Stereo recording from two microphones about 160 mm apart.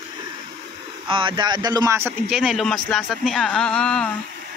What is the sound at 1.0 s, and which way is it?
Speech, 30° right (ahead or behind).